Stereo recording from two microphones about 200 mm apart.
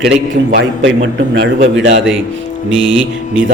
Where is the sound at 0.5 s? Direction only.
60° right (ahead or behind).